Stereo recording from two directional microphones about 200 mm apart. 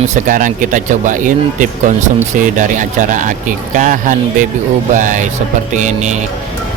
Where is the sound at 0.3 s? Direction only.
40° right (ahead or behind).